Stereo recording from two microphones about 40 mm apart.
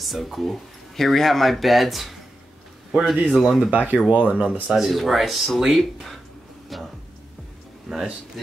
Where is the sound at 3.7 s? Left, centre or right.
Right.